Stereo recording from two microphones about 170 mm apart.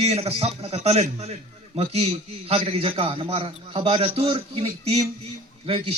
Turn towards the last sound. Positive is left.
turn(degrees=-30)  # may be behind; listen again after turning